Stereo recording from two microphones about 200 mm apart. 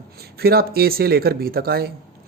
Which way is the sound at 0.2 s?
50° right (ahead or behind).